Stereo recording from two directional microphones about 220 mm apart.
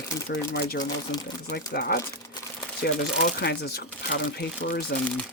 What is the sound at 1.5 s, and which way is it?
Speech, 45° left (ahead or behind).